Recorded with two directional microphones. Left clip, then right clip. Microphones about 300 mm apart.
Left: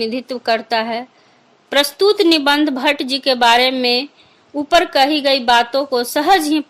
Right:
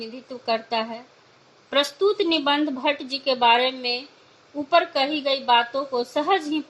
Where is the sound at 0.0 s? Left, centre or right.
Left.